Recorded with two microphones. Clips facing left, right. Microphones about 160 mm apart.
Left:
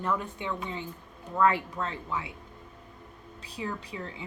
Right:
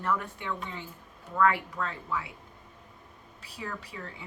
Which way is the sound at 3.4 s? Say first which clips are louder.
Left 4 dB; 20° left (ahead or behind).